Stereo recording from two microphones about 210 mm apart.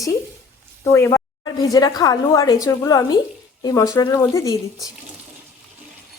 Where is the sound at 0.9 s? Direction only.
15° left (ahead or behind).